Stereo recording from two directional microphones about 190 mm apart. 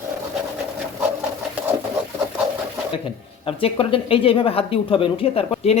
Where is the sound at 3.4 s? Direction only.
30° left (ahead or behind).